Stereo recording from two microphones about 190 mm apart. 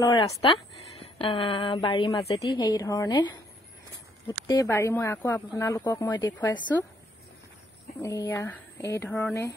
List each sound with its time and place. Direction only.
0.0 s a woman's voice: 20° left (ahead or behind)
8.0 s speech: 15° left (ahead or behind)